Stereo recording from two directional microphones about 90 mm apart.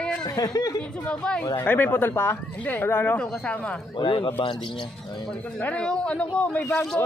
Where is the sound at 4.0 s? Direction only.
65° left (ahead or behind).